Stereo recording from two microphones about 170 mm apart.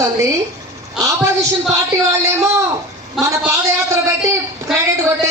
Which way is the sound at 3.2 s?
Centre (ahead or behind).